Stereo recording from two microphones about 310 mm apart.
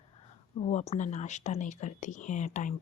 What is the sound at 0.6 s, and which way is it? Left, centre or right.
A woman's voice, left.